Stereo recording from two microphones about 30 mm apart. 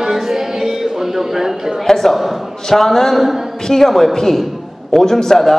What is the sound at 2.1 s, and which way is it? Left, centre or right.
Speech, centre.